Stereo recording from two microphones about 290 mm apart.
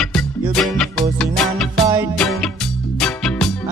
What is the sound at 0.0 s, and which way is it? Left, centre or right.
Music, centre.